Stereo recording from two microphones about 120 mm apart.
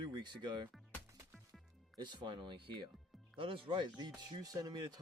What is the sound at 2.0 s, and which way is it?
Speech, 40° right (ahead or behind).